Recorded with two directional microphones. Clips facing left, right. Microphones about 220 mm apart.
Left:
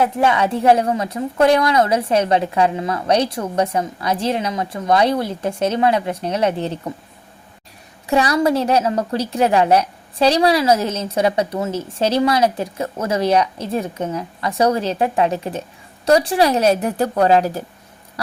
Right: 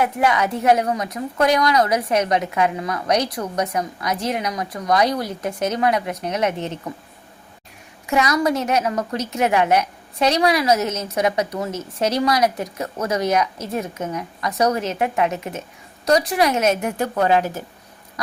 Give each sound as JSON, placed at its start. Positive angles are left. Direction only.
{"t": 0.0, "sound": "a woman's voice", "side_deg": 30}
{"t": 8.0, "sound": "a woman's voice", "side_deg": 30}